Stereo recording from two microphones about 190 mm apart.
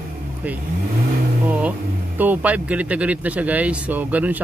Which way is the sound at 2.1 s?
10° right (ahead or behind).